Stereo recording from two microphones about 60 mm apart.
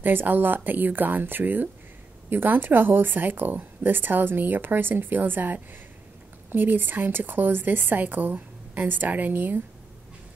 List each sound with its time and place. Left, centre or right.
0.0 s speech: right